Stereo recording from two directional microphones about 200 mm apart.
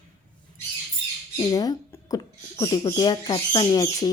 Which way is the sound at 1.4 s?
20° left (ahead or behind).